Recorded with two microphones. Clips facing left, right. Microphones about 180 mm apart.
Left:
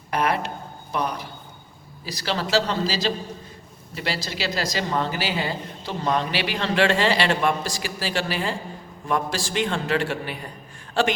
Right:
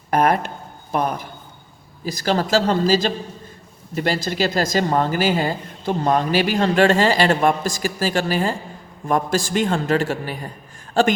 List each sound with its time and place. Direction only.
0.1 s a woman's voice: 50° right (ahead or behind)